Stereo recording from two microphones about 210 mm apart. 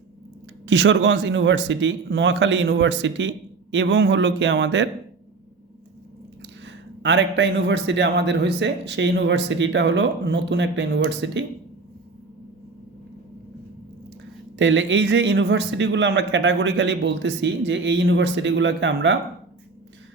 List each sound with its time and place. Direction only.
0.6 s a man's voice: 60° right (ahead or behind)
6.7 s a man's voice: 60° right (ahead or behind)
14.6 s a man's voice: 60° right (ahead or behind)